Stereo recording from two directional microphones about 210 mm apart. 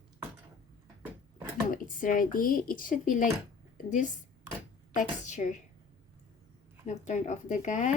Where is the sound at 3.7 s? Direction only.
35° left (ahead or behind).